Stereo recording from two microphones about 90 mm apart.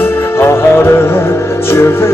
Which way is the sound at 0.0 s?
30° left (ahead or behind).